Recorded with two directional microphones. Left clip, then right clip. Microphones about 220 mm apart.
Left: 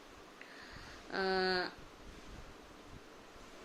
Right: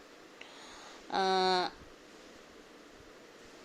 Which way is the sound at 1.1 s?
20° right (ahead or behind).